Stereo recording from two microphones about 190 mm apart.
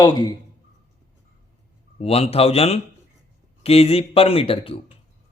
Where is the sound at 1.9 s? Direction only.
30° left (ahead or behind).